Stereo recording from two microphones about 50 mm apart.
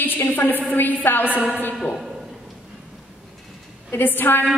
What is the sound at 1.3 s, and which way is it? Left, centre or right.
Speech, right.